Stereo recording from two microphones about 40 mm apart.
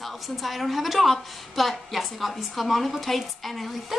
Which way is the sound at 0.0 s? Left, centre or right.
Centre.